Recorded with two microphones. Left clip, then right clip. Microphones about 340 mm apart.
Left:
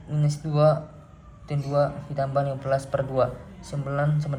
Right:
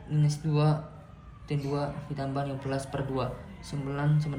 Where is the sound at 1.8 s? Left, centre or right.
Left.